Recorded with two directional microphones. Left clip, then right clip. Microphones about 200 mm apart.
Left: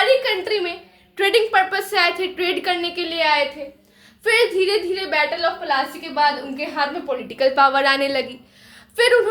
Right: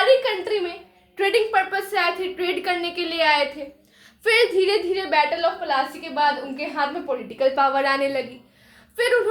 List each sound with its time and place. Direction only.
0.0 s a sound: 20° right (ahead or behind)
0.4 s a woman's voice: 5° right (ahead or behind); by 6.8 s 20° right (ahead or behind)
7.1 s a woman's voice: centre (ahead or behind)
9.0 s a woman's voice: 20° left (ahead or behind)